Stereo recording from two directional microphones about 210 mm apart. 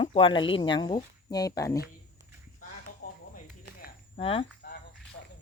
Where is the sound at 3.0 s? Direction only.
45° left (ahead or behind).